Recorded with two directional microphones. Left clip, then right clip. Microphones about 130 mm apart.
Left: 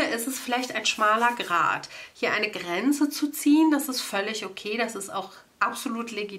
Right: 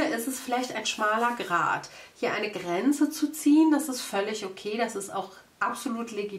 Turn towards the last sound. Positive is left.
turn(degrees=20)  # may be behind; listen again after turning